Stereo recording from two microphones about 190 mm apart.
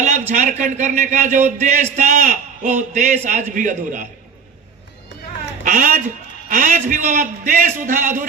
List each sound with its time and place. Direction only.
0.0 s a man's voice: 40° right (ahead or behind)
5.6 s a man's voice: 45° right (ahead or behind)